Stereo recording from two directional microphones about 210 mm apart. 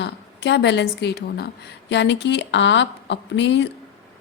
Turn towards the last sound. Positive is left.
turn(degrees=60)  # may be behind; listen again after turning